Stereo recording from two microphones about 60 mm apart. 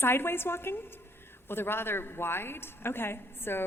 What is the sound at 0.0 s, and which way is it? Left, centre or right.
A woman's voice, left.